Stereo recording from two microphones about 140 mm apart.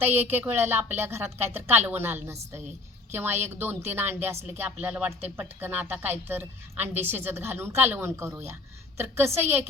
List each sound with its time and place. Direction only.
0.0 s a woman's voice: 15° right (ahead or behind)